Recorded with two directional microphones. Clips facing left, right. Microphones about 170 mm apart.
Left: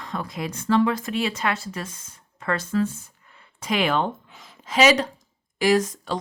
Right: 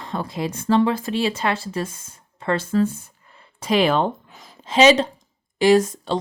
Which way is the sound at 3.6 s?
30° right (ahead or behind).